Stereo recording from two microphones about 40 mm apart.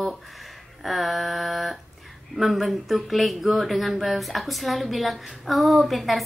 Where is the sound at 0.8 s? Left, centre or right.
Centre.